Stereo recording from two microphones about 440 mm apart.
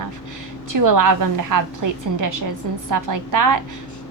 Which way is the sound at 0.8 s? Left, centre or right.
Right.